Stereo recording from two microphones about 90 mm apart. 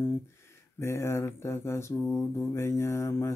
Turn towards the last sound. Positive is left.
turn(degrees=30)  # may be behind; listen again after turning